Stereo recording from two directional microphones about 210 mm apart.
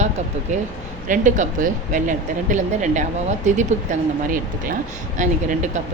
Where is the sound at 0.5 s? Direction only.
35° right (ahead or behind).